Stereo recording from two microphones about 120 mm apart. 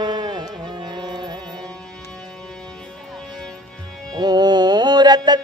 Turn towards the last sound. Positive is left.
turn(degrees=-35)  # may be behind; listen again after turning